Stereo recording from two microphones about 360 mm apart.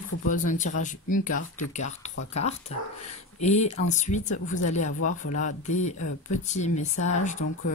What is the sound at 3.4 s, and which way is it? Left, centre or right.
Speech, centre.